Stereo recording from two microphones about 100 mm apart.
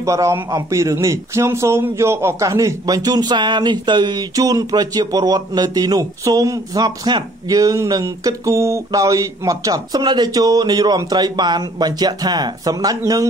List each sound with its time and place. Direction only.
0.0 s speech: 30° right (ahead or behind)